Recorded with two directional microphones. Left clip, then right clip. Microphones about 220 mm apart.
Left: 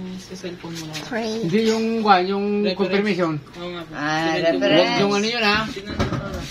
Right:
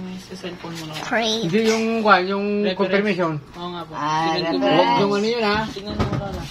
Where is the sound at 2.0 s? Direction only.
40° left (ahead or behind).